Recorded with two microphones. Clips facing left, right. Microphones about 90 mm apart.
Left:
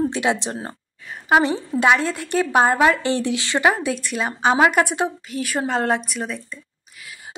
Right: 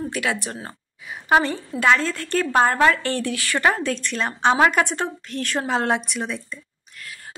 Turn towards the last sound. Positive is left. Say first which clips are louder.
# right 2 dB
turn(degrees=5)  # may be behind; listen again after turning